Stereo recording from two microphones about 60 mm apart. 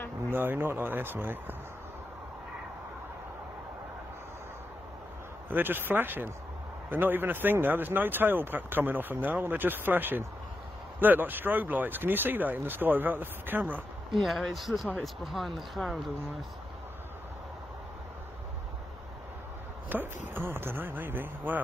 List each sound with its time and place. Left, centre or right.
0.3 s speech: right
5.5 s speech: right
14.1 s speech: centre
19.9 s speech: right